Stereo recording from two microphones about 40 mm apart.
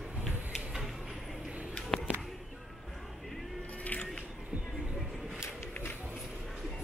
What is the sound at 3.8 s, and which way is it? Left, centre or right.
Biting, left.